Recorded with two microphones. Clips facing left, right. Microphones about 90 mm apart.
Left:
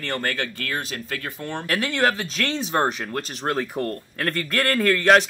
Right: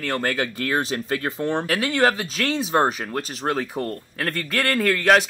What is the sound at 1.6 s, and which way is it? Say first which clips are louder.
Speech: even; centre (ahead or behind).